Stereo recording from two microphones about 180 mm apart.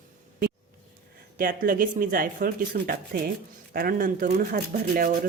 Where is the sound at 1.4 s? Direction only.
50° right (ahead or behind).